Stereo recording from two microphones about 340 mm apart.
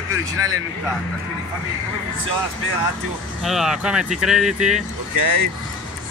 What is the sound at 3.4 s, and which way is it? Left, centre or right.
Speech, centre.